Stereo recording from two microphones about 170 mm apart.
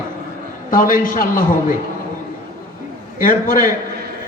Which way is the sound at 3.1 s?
55° left (ahead or behind).